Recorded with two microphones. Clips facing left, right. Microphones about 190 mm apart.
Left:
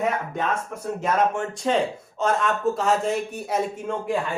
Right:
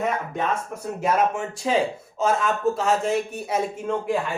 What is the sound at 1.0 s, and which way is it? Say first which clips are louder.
A man's voice: right 1 dB; 5° right (ahead or behind).